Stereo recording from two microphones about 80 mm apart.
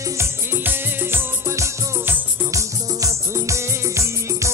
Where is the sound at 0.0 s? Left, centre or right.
Right.